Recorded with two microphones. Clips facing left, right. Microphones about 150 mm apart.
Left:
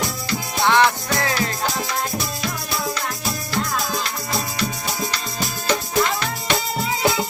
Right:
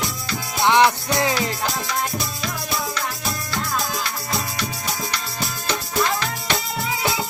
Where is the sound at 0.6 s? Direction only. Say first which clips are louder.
Right 1 dB; 15° right (ahead or behind).